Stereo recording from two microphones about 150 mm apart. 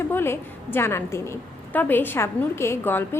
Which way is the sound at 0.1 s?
15° left (ahead or behind).